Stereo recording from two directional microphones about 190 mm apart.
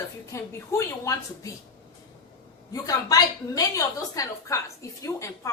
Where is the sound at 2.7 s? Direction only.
20° left (ahead or behind).